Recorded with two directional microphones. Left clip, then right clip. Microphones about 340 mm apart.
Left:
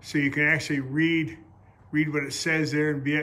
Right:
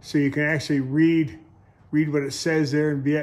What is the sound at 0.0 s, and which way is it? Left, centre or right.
A man's voice, centre.